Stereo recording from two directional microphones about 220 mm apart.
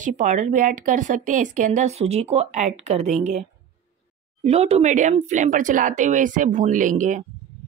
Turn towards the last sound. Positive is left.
turn(degrees=-35)  # may be behind; listen again after turning